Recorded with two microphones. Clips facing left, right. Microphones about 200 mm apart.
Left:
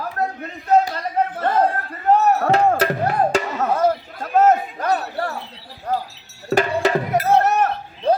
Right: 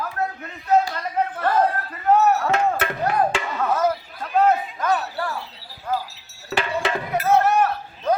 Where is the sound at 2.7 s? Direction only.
35° left (ahead or behind).